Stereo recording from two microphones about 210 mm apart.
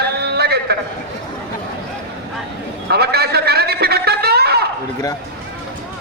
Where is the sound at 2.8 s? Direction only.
50° right (ahead or behind).